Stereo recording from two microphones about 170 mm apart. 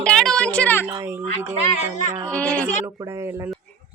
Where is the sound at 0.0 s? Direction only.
5° left (ahead or behind).